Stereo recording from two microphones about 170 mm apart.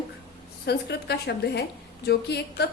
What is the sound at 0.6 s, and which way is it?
A woman's voice, 75° left (ahead or behind).